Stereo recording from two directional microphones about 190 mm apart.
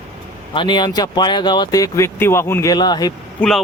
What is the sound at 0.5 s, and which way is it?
Speech, 25° left (ahead or behind).